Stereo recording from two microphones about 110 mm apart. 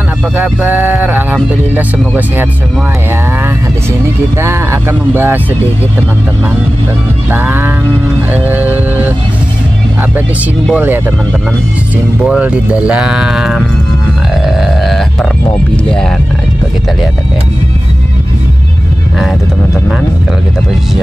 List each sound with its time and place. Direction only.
0.4 s speech: 15° right (ahead or behind)
4.4 s speech: 20° right (ahead or behind)
7.2 s speech: 20° right (ahead or behind)
10.7 s speech: 15° right (ahead or behind)
12.2 s speech: 10° right (ahead or behind)
14.4 s a sound: centre (ahead or behind)